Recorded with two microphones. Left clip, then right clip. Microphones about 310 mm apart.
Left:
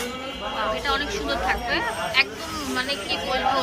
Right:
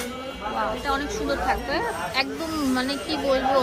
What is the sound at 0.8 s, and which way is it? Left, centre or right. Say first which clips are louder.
Speech: left 1 dB; centre.